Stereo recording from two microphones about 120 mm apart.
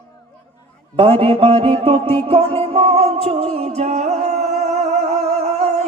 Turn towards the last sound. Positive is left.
turn(degrees=-65)  # may be behind; listen again after turning